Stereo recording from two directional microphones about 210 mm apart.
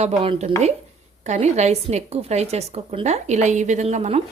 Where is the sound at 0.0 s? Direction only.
30° right (ahead or behind).